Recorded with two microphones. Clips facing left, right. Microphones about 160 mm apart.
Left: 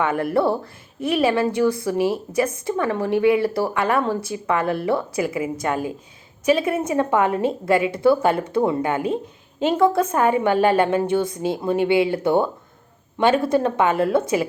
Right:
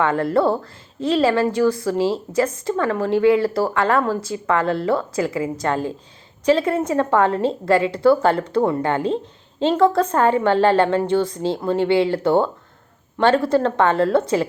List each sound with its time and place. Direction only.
0.0 s a woman's voice: 15° left (ahead or behind)